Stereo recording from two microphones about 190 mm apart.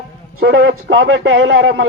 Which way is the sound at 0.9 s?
90° right.